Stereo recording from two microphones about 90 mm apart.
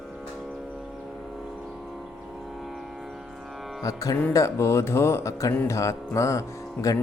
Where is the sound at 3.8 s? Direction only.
40° left (ahead or behind).